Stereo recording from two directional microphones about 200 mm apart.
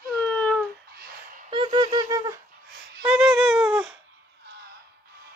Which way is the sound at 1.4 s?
25° right (ahead or behind).